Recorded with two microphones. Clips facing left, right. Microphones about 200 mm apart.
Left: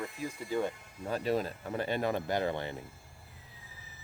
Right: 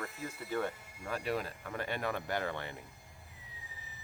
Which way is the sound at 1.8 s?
30° left (ahead or behind).